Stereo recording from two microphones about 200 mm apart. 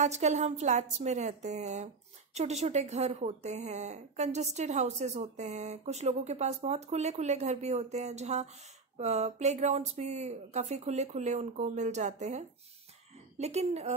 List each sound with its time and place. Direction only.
0.0 s speech: 35° right (ahead or behind)